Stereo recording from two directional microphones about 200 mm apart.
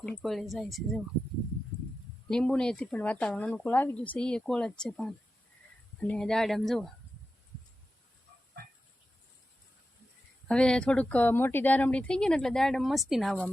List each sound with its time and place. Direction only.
0.0 s speech: centre (ahead or behind)
2.3 s speech: 5° left (ahead or behind)
10.5 s speech: 5° left (ahead or behind)